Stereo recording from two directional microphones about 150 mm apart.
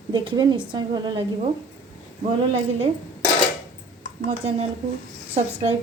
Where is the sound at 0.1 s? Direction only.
30° right (ahead or behind).